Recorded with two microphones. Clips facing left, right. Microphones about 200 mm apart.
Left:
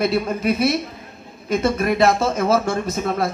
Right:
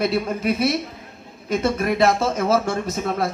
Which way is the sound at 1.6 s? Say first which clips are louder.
Left 1 dB; 65° left (ahead or behind).